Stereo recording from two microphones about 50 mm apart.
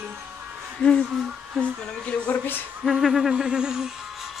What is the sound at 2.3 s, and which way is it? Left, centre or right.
Speech, left.